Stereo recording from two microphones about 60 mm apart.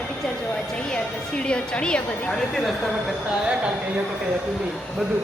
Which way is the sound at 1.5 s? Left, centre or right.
Centre.